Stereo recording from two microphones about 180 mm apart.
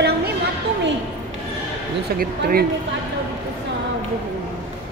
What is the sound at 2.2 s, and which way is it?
Speech, 55° right (ahead or behind).